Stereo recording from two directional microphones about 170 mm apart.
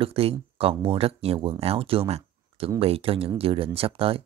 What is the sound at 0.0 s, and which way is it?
Speech, 35° right (ahead or behind).